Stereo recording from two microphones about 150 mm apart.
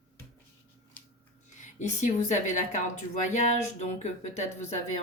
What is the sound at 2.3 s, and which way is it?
A woman's voice, 55° left (ahead or behind).